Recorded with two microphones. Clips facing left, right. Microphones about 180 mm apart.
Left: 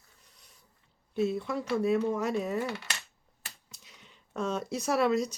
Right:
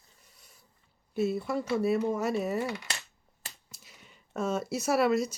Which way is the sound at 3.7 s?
5° right (ahead or behind).